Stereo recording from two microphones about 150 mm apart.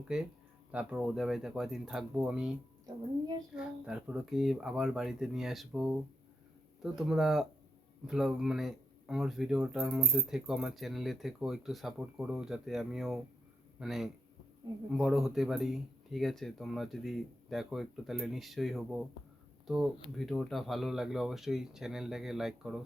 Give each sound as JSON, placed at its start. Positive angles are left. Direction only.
{"t": 0.7, "sound": "speech", "side_deg": -10}